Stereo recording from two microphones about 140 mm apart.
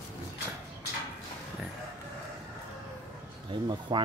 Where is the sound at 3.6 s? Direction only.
35° right (ahead or behind).